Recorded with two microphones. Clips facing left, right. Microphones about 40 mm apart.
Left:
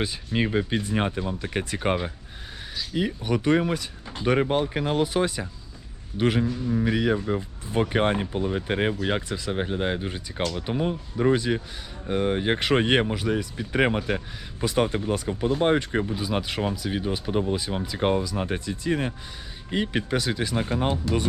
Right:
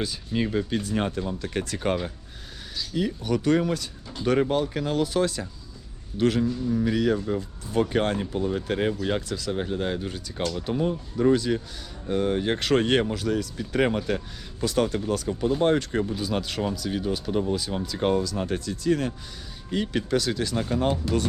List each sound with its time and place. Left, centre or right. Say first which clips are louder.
0.0 s a man's voice: left 1 dB; left